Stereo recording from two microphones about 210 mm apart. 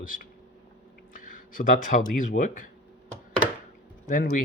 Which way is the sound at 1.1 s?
40° left (ahead or behind).